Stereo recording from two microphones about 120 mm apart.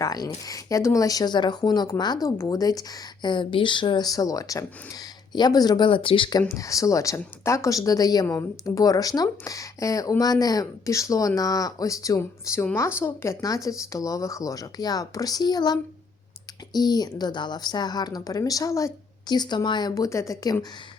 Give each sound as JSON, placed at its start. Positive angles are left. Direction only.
{"t": 0.0, "sound": "speech", "side_deg": 30}
{"t": 6.5, "sound": "speech", "side_deg": 25}